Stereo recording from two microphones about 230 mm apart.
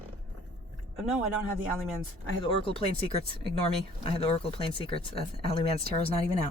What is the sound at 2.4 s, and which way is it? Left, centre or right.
Speech, left.